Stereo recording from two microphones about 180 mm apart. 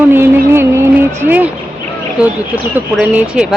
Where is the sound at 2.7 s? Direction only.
5° right (ahead or behind).